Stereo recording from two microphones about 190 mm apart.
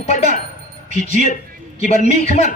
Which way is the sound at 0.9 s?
40° right (ahead or behind).